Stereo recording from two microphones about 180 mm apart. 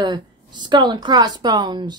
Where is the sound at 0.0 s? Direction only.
25° right (ahead or behind).